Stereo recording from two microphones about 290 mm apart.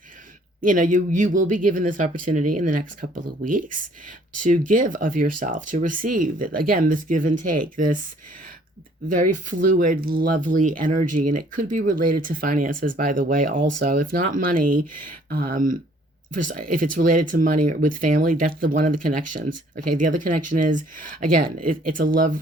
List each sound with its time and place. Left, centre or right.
0.6 s speech: right
9.0 s speech: right